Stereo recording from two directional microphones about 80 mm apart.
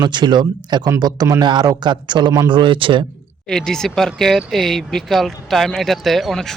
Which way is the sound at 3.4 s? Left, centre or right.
Centre.